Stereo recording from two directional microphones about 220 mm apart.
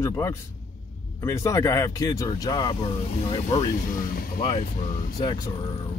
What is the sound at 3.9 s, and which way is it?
Speech, 40° left (ahead or behind).